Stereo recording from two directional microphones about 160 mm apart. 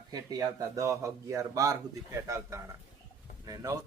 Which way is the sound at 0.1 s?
20° right (ahead or behind).